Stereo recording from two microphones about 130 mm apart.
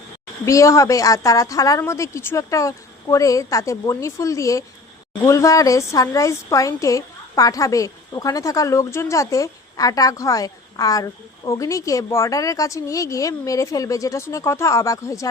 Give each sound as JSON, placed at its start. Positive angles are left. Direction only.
{"t": 0.4, "sound": "a woman's voice", "side_deg": 25}